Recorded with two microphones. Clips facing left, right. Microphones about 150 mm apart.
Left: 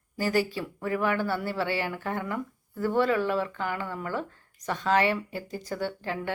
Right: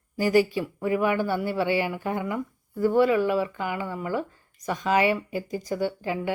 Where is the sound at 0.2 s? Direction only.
15° right (ahead or behind).